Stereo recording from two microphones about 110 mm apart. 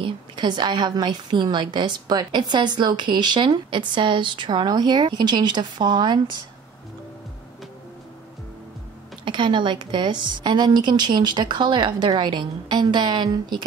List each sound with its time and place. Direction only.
0.0 s a woman's voice: 45° right (ahead or behind)
9.2 s a woman's voice: 45° right (ahead or behind)